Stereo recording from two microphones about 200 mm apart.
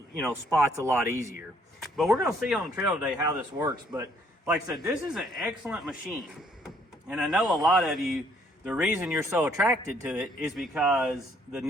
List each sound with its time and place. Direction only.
0.5 s a man's voice: 15° right (ahead or behind)
1.8 s speech: centre (ahead or behind)
2.8 s a man's voice: 15° right (ahead or behind)
4.5 s a man's voice: centre (ahead or behind)